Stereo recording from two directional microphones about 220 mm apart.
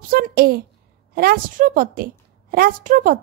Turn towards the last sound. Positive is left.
turn(degrees=-40)  # may be behind; listen again after turning